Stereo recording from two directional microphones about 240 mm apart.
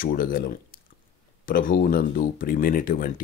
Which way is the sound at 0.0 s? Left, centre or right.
Left.